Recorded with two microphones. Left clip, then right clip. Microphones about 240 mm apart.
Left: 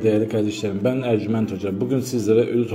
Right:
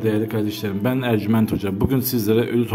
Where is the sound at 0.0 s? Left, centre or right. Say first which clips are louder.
Left 2 dB; centre.